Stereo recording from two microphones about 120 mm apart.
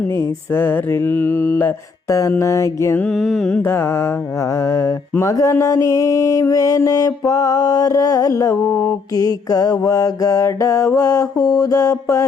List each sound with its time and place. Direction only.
0.1 s mantra: 20° left (ahead or behind)
3.0 s mantra: 5° left (ahead or behind)
3.6 s mantra: 20° left (ahead or behind)
8.6 s mantra: 10° left (ahead or behind)
9.1 s mantra: 30° left (ahead or behind)